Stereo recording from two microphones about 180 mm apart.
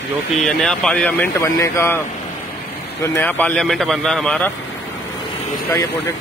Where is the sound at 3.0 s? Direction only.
15° left (ahead or behind).